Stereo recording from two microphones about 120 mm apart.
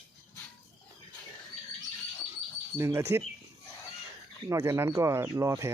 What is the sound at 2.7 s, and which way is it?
Speech, 20° right (ahead or behind).